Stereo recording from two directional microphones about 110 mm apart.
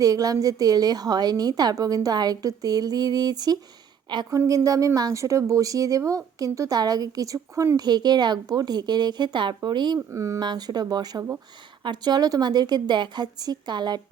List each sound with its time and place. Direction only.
0.0 s a woman's voice: 35° right (ahead or behind)
7.3 s speech: 20° right (ahead or behind)
7.9 s a woman's voice: 40° right (ahead or behind)
10.1 s speech: 30° right (ahead or behind)
10.4 s a woman's voice: 40° right (ahead or behind)